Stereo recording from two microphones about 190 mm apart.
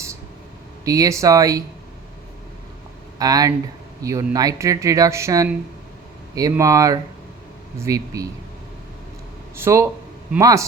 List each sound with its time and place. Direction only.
0.9 s speech: 15° right (ahead or behind)
3.2 s speech: 20° right (ahead or behind)
9.6 s speech: 15° right (ahead or behind)